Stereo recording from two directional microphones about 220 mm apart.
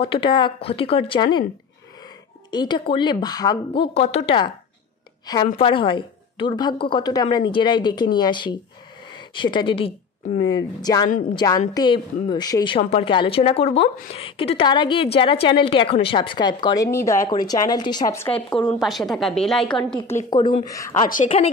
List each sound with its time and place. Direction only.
0.0 s a woman's voice: 25° left (ahead or behind)
2.5 s a woman's voice: 20° left (ahead or behind)
20.2 s speech: 20° left (ahead or behind)
21.1 s speech: 30° left (ahead or behind)